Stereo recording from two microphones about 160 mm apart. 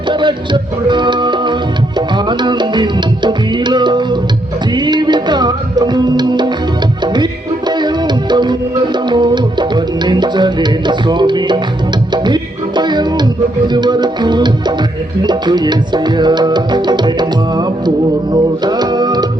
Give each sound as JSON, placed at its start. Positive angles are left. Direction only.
{"t": 0.1, "sound": "music", "side_deg": -30}